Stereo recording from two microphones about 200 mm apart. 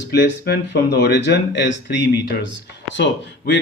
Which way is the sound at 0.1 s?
55° left (ahead or behind).